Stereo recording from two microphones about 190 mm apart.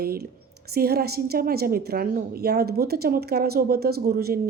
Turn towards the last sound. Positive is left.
turn(degrees=-55)  # may be behind; listen again after turning